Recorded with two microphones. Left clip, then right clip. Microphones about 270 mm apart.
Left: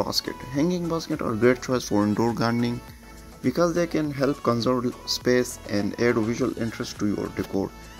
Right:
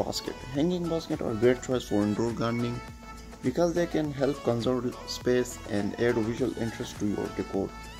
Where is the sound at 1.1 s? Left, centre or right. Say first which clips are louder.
Left 4 dB; centre.